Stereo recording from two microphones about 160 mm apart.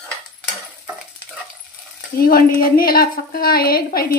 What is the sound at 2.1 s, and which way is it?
A woman's voice, 65° left (ahead or behind).